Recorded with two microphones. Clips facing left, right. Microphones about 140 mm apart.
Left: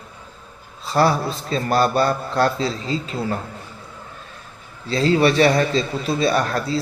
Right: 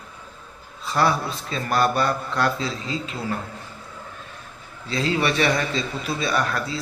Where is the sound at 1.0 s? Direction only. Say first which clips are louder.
Left 4 dB; 35° left (ahead or behind).